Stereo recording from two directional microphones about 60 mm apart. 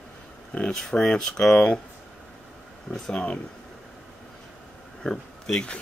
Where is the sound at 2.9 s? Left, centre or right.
Centre.